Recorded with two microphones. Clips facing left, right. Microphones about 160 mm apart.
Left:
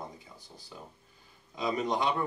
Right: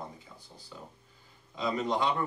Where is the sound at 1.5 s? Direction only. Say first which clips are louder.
Even; 15° left (ahead or behind).